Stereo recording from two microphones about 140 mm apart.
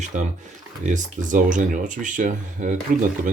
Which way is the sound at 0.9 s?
65° right (ahead or behind).